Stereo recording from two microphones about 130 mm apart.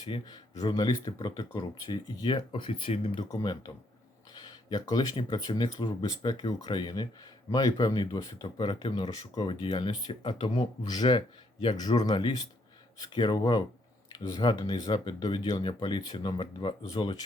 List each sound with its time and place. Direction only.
0.0 s speech: 35° left (ahead or behind)
3.2 s speech: 30° left (ahead or behind)